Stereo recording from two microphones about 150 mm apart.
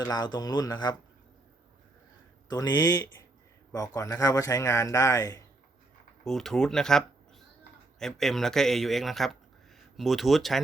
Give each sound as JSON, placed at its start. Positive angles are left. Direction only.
{"t": 0.1, "sound": "speech", "side_deg": 25}
{"t": 2.5, "sound": "speech", "side_deg": 25}
{"t": 6.2, "sound": "a man's voice", "side_deg": 5}